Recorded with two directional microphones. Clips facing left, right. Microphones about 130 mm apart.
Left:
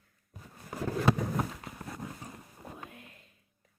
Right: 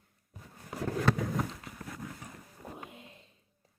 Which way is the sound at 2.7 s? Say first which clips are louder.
Right 1 dB; 20° right (ahead or behind).